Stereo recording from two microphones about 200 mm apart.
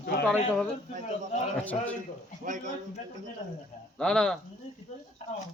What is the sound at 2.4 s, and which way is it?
Speech, 40° right (ahead or behind).